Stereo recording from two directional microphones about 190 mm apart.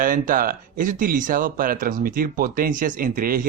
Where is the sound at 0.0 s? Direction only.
45° right (ahead or behind).